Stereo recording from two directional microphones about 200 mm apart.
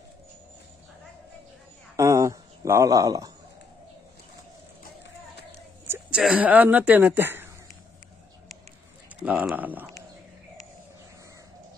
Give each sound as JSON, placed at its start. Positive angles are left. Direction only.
{"t": 2.0, "sound": "speech", "side_deg": -15}
{"t": 5.9, "sound": "speech", "side_deg": -5}
{"t": 9.2, "sound": "speech", "side_deg": -5}